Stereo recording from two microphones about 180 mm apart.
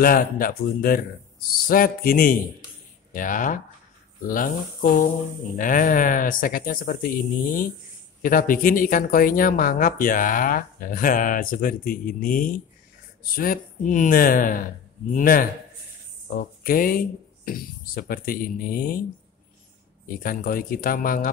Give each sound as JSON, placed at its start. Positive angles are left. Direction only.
{"t": 0.0, "sound": "speech", "side_deg": 50}
{"t": 20.1, "sound": "speech", "side_deg": 55}